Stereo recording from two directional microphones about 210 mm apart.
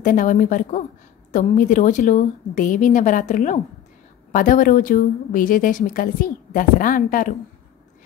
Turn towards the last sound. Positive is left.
turn(degrees=40)  # may be behind; listen again after turning